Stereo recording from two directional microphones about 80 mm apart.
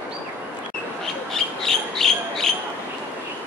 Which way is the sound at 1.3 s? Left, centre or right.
Centre.